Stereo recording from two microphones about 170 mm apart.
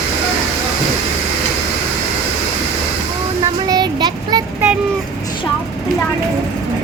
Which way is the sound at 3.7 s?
25° right (ahead or behind).